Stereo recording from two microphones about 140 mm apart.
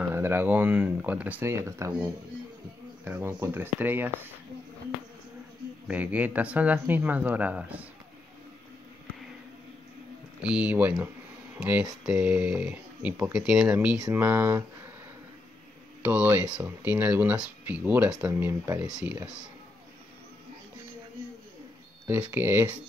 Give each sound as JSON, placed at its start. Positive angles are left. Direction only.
{"t": 0.0, "sound": "speech", "side_deg": -15}
{"t": 3.1, "sound": "speech", "side_deg": -20}
{"t": 5.9, "sound": "speech", "side_deg": -10}
{"t": 10.4, "sound": "speech", "side_deg": -10}
{"t": 16.0, "sound": "speech", "side_deg": -10}
{"t": 22.0, "sound": "speech", "side_deg": -15}